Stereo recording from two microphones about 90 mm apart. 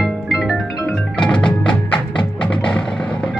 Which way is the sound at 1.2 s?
10° left (ahead or behind).